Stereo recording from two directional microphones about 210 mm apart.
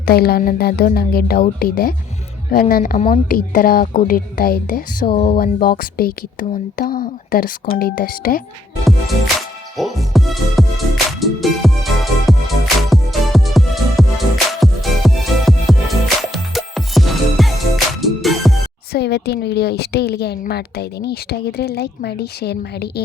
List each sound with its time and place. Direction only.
0.1 s a woman's voice: 45° left (ahead or behind)
8.8 s music: centre (ahead or behind)
18.9 s a woman's voice: 50° left (ahead or behind)